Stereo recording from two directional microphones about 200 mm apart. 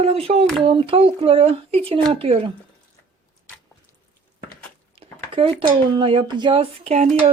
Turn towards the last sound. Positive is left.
turn(degrees=-35)  # may be behind; listen again after turning